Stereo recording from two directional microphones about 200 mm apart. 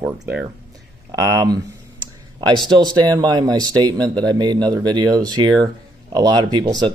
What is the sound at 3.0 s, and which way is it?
Speech, 20° right (ahead or behind).